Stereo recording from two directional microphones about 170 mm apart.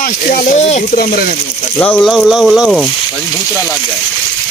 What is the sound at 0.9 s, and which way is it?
Speech, 65° left (ahead or behind).